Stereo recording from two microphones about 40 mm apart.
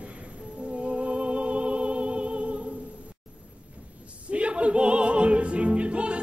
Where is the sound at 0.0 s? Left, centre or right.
Right.